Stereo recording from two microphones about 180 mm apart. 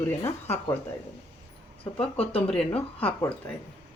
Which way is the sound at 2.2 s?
30° left (ahead or behind).